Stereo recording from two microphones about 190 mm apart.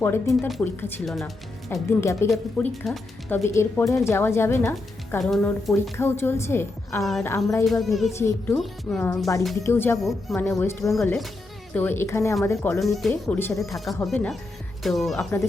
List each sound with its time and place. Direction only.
0.3 s speech: centre (ahead or behind)
0.6 s speech: 10° left (ahead or behind)
1.0 s speech: centre (ahead or behind)
1.7 s speech: 15° left (ahead or behind)
2.3 s speech: 5° left (ahead or behind)
6.0 s speech: 10° left (ahead or behind)
7.0 s speech: centre (ahead or behind)
7.3 s speech: 15° left (ahead or behind)
7.6 s speech: centre (ahead or behind)
10.0 s speech: centre (ahead or behind)
10.5 s speech: 15° left (ahead or behind)
12.8 s speech: centre (ahead or behind)